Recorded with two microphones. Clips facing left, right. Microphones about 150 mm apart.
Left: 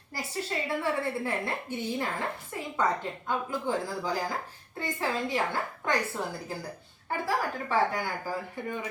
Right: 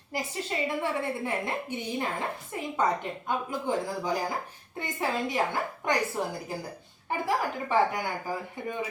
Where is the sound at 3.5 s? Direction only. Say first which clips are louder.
Right 1 dB; 20° right (ahead or behind).